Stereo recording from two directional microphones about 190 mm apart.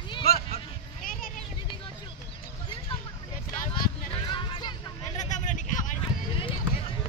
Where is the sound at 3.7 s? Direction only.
25° left (ahead or behind).